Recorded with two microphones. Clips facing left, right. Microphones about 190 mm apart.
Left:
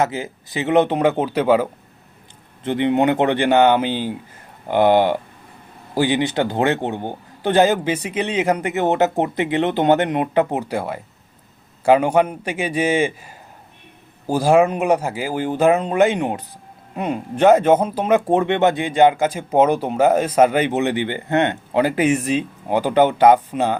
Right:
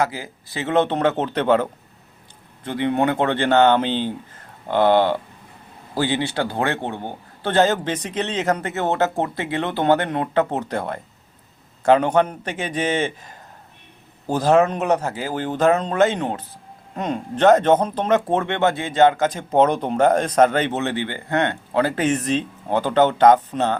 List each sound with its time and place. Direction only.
0.0 s speech: 20° left (ahead or behind)
2.6 s speech: 20° left (ahead or behind)